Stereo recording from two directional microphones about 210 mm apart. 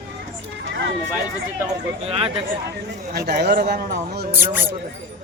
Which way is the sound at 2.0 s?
30° right (ahead or behind).